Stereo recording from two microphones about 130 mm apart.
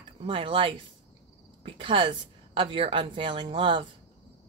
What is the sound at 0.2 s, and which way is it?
A woman's voice, 40° right (ahead or behind).